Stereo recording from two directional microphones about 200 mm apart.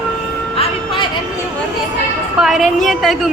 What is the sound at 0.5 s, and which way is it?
Vehicle, 30° left (ahead or behind).